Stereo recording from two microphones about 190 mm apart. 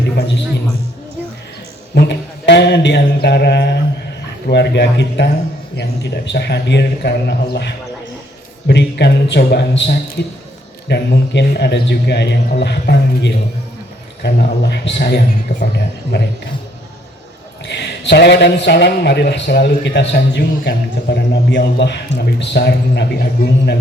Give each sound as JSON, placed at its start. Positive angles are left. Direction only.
{"t": 0.2, "sound": "basketball bounce", "side_deg": 65}
{"t": 2.0, "sound": "a man's voice", "side_deg": 65}
{"t": 8.6, "sound": "a man's voice", "side_deg": 65}
{"t": 17.7, "sound": "a man's voice", "side_deg": 65}